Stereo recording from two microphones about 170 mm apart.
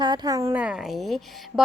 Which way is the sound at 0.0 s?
25° right (ahead or behind).